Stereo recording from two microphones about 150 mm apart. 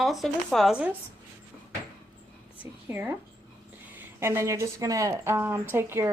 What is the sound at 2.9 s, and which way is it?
Speech, 15° right (ahead or behind).